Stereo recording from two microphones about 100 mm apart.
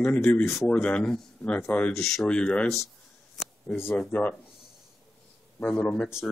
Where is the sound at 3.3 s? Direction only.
Centre (ahead or behind).